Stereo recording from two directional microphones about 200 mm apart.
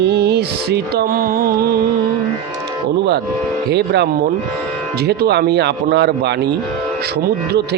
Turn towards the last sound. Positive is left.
turn(degrees=-55)  # may be behind; listen again after turning